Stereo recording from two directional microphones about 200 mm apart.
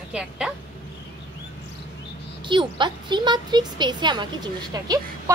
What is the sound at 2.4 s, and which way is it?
Speech, 25° right (ahead or behind).